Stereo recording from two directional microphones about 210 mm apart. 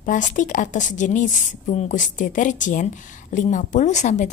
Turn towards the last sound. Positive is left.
turn(degrees=35)  # may be behind; listen again after turning